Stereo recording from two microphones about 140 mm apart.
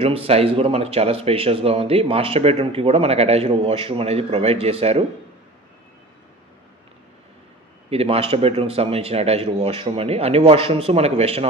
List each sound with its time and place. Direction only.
0.0 s speech: 45° right (ahead or behind)
7.9 s speech: 45° right (ahead or behind)